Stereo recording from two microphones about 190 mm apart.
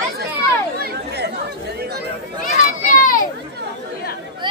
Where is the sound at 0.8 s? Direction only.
60° right (ahead or behind).